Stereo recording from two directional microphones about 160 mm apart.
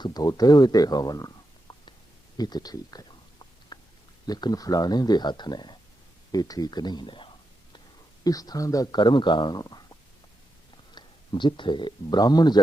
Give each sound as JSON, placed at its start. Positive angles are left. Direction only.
{"t": 0.0, "sound": "speech", "side_deg": 25}
{"t": 2.4, "sound": "a sound", "side_deg": 25}
{"t": 4.3, "sound": "speech", "side_deg": 25}
{"t": 10.9, "sound": "speech", "side_deg": 30}